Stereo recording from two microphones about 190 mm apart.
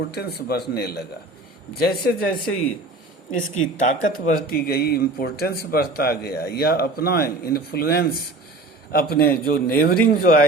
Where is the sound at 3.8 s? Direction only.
45° left (ahead or behind).